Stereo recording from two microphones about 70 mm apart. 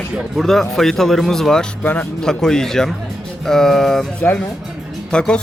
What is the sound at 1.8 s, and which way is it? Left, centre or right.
Speech, left.